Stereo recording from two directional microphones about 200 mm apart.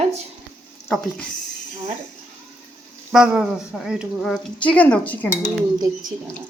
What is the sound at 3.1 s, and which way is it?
Speech, 5° right (ahead or behind).